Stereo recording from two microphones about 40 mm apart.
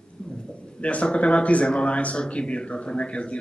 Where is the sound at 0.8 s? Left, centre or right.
Left.